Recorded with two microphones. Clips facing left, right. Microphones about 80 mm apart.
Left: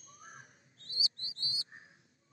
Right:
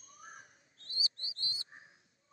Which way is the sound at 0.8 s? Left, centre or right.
Right.